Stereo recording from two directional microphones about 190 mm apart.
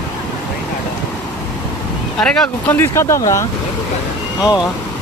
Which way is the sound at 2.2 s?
5° left (ahead or behind).